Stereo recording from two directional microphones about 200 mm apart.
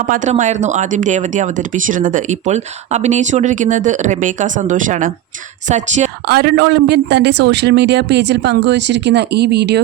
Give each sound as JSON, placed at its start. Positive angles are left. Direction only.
{"t": 0.1, "sound": "speech", "side_deg": -40}
{"t": 6.2, "sound": "a man's voice", "side_deg": -50}